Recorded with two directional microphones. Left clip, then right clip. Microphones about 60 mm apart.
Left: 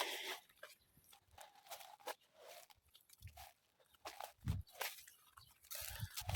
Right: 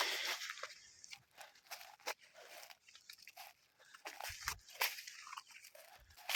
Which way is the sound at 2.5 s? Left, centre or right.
Centre.